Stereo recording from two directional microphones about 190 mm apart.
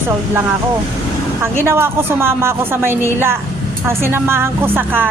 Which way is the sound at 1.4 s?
10° right (ahead or behind).